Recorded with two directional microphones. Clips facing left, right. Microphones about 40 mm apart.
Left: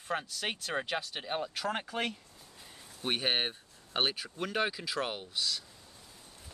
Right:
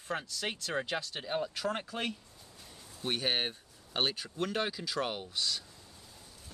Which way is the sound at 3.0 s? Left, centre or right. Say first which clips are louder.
Left 1 dB; centre.